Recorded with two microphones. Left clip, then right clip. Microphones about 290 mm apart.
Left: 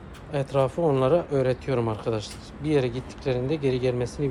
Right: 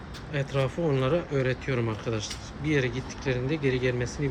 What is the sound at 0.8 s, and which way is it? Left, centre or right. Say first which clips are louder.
Speech: left 4 dB; centre.